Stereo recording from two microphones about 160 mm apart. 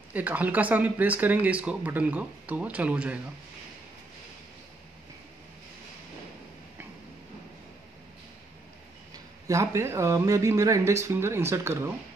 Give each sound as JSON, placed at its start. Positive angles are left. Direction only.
{"t": 0.1, "sound": "speech", "side_deg": -10}
{"t": 9.5, "sound": "speech", "side_deg": -20}